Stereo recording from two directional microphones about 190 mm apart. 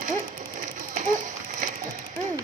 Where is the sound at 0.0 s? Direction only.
45° right (ahead or behind).